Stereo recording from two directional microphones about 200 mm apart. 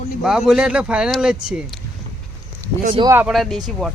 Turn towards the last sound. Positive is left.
turn(degrees=5)  # may be behind; listen again after turning